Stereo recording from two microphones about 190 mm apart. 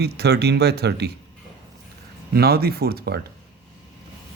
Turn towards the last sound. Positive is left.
turn(degrees=-55)  # may be behind; listen again after turning